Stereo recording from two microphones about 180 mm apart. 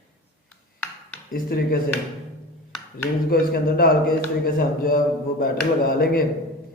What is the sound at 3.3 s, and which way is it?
A man's voice, 55° left (ahead or behind).